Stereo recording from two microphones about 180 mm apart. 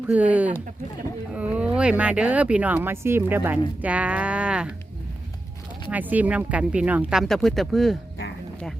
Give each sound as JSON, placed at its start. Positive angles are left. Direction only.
{"t": 0.1, "sound": "speech", "side_deg": -10}
{"t": 5.9, "sound": "speech", "side_deg": -10}